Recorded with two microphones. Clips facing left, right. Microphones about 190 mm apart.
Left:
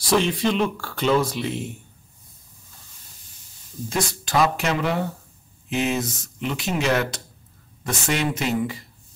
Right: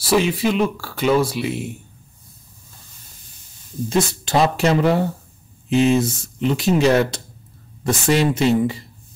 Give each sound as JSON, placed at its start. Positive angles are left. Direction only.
{"t": 0.0, "sound": "speech", "side_deg": -5}
{"t": 3.9, "sound": "speech", "side_deg": -25}